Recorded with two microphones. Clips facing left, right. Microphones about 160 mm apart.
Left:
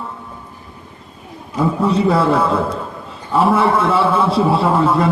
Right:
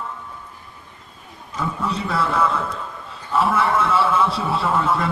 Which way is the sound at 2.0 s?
30° left (ahead or behind).